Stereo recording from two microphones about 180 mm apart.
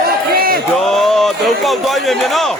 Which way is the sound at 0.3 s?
55° right (ahead or behind).